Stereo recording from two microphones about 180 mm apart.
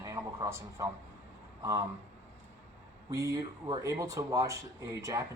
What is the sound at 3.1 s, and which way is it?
Speech, 20° right (ahead or behind).